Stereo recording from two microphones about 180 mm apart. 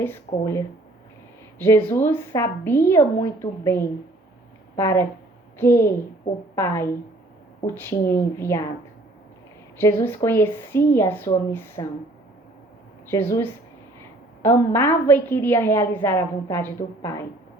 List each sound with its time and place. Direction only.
0.0 s a woman's voice: 15° left (ahead or behind)
9.7 s a woman's voice: 15° left (ahead or behind)
13.1 s a woman's voice: 15° left (ahead or behind)